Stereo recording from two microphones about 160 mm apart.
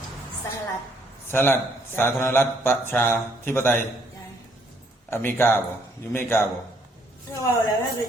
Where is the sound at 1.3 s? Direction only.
15° left (ahead or behind).